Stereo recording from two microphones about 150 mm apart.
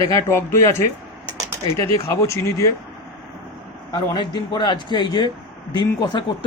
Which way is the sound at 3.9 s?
30° left (ahead or behind).